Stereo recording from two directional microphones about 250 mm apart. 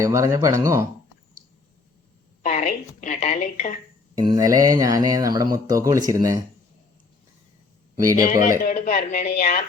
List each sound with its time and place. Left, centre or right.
0.0 s speech: centre
2.4 s speech: left
4.2 s speech: centre
7.9 s speech: centre
8.3 s speech: left